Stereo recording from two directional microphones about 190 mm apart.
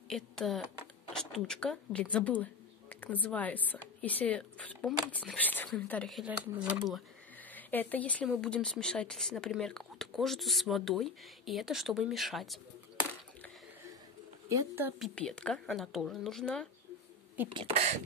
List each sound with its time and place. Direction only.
0.1 s speech: centre (ahead or behind)
7.5 s speech: 10° left (ahead or behind)
14.5 s speech: 15° right (ahead or behind)
15.0 s speech: 5° left (ahead or behind)
17.6 s speech: 30° right (ahead or behind)